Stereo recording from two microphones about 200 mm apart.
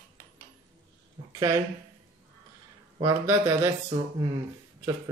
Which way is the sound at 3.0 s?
15° right (ahead or behind).